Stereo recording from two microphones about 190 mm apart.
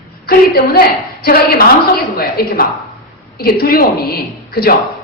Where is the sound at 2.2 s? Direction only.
50° left (ahead or behind).